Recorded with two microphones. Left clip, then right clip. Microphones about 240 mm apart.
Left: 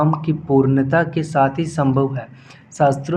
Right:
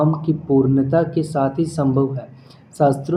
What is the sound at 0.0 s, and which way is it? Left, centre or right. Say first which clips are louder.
Speech: even; left.